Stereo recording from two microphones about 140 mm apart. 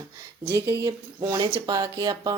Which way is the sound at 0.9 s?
35° right (ahead or behind).